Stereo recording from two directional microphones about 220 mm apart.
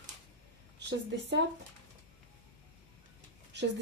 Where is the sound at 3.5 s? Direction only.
50° right (ahead or behind).